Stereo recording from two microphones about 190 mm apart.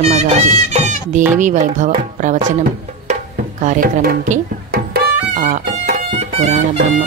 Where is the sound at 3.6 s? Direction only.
45° right (ahead or behind).